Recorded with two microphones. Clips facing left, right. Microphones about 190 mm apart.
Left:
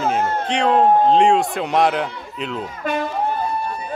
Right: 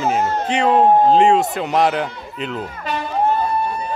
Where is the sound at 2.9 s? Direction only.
55° left (ahead or behind).